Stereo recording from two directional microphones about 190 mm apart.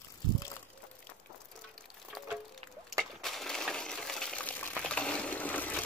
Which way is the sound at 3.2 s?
Centre (ahead or behind).